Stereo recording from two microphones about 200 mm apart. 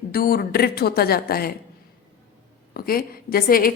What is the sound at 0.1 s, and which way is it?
Speech, 45° left (ahead or behind).